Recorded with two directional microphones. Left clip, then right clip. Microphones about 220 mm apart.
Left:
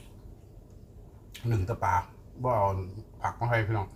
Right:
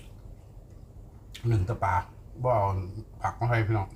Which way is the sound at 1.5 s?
5° right (ahead or behind).